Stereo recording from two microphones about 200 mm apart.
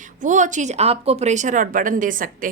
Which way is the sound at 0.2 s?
40° right (ahead or behind).